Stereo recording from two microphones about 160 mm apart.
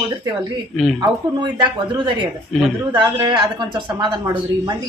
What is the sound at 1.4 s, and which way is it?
A woman's voice, 30° right (ahead or behind).